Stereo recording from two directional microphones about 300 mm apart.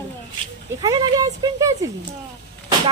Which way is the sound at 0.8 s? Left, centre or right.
Centre.